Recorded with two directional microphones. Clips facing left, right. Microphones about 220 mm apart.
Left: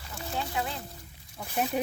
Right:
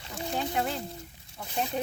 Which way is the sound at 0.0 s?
20° right (ahead or behind).